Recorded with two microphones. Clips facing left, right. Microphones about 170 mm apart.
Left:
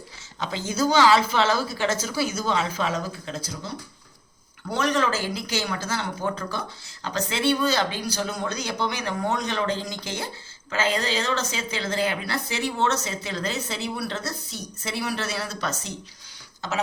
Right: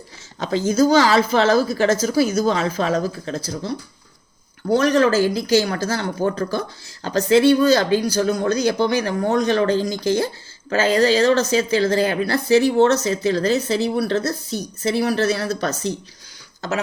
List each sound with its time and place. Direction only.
0.3 s speech: 40° right (ahead or behind)
4.7 s speech: 40° right (ahead or behind)